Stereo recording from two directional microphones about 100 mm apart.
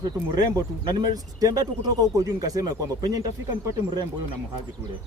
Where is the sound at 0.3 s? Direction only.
45° right (ahead or behind).